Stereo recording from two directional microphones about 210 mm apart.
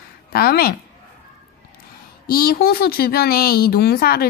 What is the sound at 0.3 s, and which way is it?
Speech, 45° left (ahead or behind).